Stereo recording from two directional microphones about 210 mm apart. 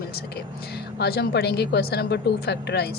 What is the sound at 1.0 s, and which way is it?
A woman's voice, 50° left (ahead or behind).